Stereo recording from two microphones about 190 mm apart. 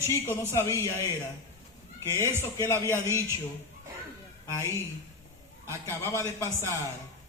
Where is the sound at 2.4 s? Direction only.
15° left (ahead or behind).